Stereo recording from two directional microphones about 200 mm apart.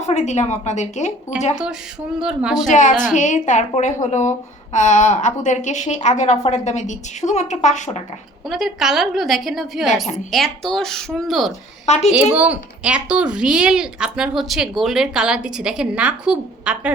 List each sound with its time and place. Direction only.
0.0 s a woman's voice: 35° left (ahead or behind)
2.1 s speech: 5° right (ahead or behind)
2.6 s a woman's voice: 40° left (ahead or behind)
8.4 s speech: centre (ahead or behind)